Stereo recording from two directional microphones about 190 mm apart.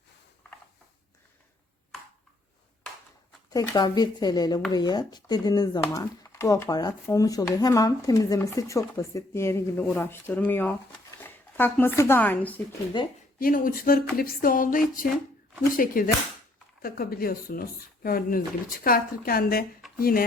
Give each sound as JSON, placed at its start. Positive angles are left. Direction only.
{"t": 3.5, "sound": "a woman's voice", "side_deg": 20}
{"t": 13.0, "sound": "a woman's voice", "side_deg": 25}
{"t": 13.4, "sound": "speech", "side_deg": 50}